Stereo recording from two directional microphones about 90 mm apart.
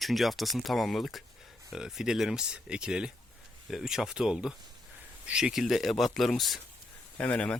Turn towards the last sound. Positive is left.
turn(degrees=15)  # may be behind; listen again after turning